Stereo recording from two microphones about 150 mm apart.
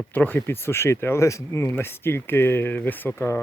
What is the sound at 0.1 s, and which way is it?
Speech, 10° left (ahead or behind).